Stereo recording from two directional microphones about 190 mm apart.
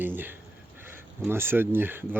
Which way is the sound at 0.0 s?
10° right (ahead or behind).